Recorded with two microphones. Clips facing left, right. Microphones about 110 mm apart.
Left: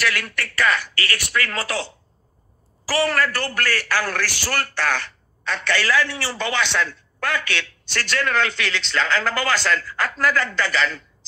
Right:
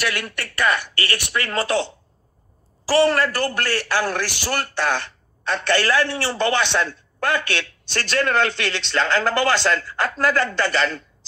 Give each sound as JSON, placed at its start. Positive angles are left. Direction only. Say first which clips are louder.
{"t": 0.0, "sound": "a man's voice", "louder": "left 1 dB", "side_deg": -20}
{"t": 2.9, "sound": "a man's voice", "louder": "right 4 dB", "side_deg": -25}